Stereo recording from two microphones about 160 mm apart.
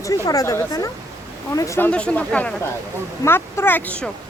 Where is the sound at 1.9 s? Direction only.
5° left (ahead or behind).